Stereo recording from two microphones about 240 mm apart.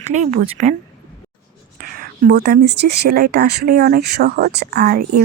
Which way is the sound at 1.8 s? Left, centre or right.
Right.